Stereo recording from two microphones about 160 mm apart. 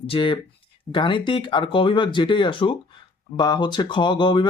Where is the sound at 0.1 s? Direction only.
35° left (ahead or behind).